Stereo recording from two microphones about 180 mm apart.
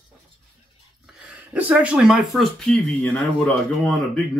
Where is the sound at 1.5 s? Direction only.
5° right (ahead or behind).